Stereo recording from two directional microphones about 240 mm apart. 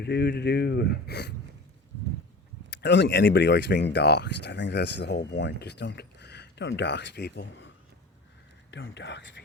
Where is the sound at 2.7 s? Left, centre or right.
Left.